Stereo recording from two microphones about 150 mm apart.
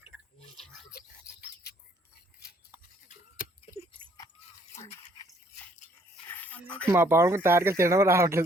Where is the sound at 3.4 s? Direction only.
70° left (ahead or behind).